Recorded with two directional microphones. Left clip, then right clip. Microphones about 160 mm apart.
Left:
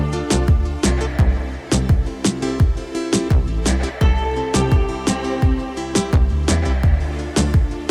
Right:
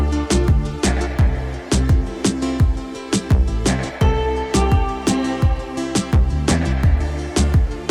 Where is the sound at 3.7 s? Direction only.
Centre (ahead or behind).